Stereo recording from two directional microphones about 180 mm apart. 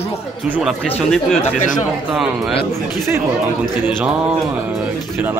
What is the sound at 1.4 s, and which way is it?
Speech, 45° left (ahead or behind).